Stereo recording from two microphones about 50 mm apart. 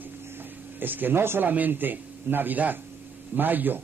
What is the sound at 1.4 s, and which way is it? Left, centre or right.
A man's voice, right.